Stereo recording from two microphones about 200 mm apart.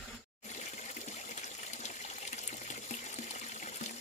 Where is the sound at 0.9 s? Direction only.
35° left (ahead or behind).